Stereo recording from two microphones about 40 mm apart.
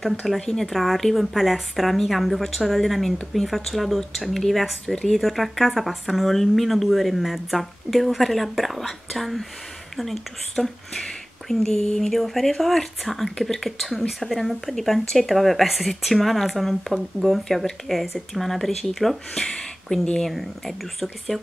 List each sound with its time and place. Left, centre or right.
0.5 s speech: centre
5.2 s speech: centre
19.3 s speech: centre
20.2 s speech: centre